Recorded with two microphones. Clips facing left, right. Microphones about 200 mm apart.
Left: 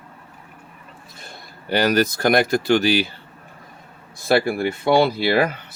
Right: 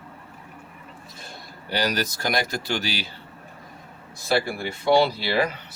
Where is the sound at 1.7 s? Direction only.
55° left (ahead or behind).